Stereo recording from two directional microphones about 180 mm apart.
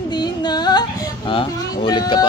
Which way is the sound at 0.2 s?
25° left (ahead or behind).